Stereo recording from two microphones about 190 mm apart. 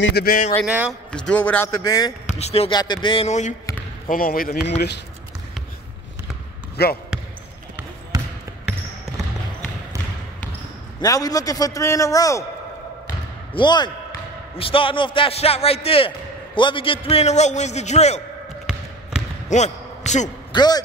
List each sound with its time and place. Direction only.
0.0 s speech: 55° left (ahead or behind)
0.7 s a man's voice: 5° right (ahead or behind)
1.1 s a man's voice: 5° left (ahead or behind)
2.3 s a man's voice: 35° left (ahead or behind)
4.1 s speech: 50° left (ahead or behind)
4.6 s speech: 60° left (ahead or behind)
6.8 s speech: 55° left (ahead or behind)
8.1 s basketball bounce: 20° right (ahead or behind)
11.0 s a man's voice: 20° left (ahead or behind)
13.6 s a man's voice: 25° left (ahead or behind)
19.5 s a sound: 35° left (ahead or behind)
20.5 s a man's voice: 20° left (ahead or behind)